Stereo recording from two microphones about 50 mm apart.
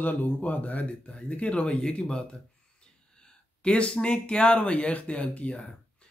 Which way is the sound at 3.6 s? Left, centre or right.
Left.